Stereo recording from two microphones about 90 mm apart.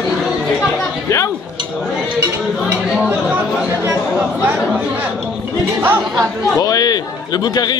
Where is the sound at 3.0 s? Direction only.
15° right (ahead or behind).